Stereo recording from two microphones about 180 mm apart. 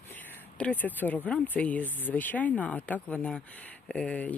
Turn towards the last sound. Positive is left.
turn(degrees=5)  # may be behind; listen again after turning